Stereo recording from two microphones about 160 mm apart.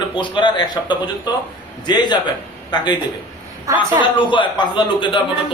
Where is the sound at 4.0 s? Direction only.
30° left (ahead or behind).